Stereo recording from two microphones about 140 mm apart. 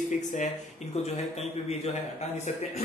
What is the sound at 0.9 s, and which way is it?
Speech, 50° left (ahead or behind).